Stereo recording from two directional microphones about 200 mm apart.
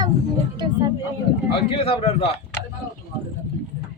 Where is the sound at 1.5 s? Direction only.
25° left (ahead or behind).